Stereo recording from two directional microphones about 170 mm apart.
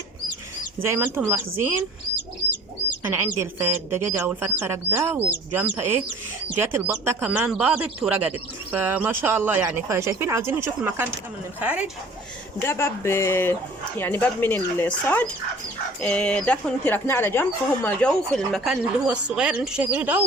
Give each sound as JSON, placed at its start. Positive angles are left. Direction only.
{"t": 0.9, "sound": "speech", "side_deg": -15}
{"t": 3.1, "sound": "speech", "side_deg": -15}
{"t": 12.5, "sound": "speech", "side_deg": 15}